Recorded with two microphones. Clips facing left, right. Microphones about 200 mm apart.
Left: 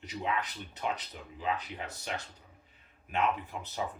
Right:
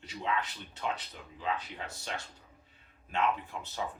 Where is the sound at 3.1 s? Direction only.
20° left (ahead or behind).